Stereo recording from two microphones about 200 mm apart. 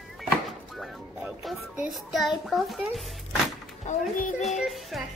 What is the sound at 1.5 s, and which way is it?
A child's voice, centre (ahead or behind).